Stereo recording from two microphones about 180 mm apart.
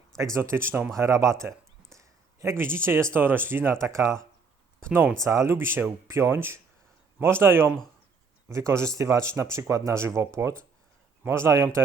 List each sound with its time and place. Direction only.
0.3 s speech: 15° right (ahead or behind)
2.0 s a sound: 15° right (ahead or behind)
2.7 s speech: 15° right (ahead or behind)